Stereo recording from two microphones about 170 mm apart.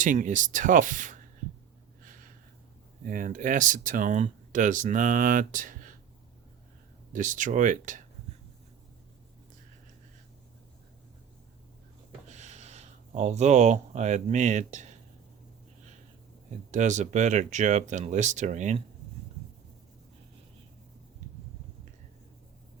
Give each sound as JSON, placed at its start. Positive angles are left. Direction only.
{"t": 0.0, "sound": "speech", "side_deg": -50}
{"t": 3.1, "sound": "speech", "side_deg": -50}
{"t": 7.1, "sound": "speech", "side_deg": -50}
{"t": 12.3, "sound": "speech", "side_deg": -45}
{"t": 16.7, "sound": "speech", "side_deg": -45}